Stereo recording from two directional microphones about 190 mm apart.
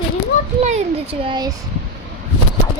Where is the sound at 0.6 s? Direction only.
35° right (ahead or behind).